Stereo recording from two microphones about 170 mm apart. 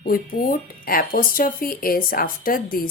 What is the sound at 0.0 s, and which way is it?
Speech, 55° left (ahead or behind).